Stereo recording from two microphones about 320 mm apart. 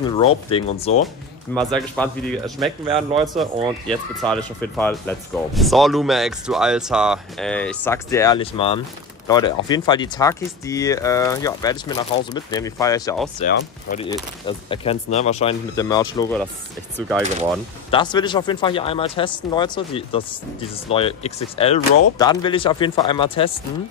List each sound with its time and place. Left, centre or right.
0.2 s speech: centre
1.5 s speech: centre
2.9 s a man's voice: centre
3.3 s speech: centre
13.4 s speech: left
17.9 s speech: centre